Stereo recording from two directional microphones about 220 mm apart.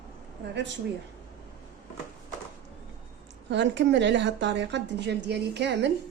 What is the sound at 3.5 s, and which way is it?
A woman's voice, 55° right (ahead or behind).